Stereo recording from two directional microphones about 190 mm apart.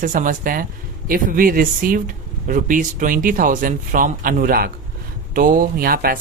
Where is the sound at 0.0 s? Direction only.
45° right (ahead or behind).